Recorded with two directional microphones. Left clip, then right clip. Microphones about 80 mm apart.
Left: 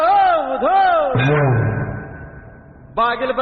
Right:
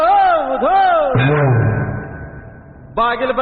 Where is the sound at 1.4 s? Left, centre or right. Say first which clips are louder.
Right 2 dB; left.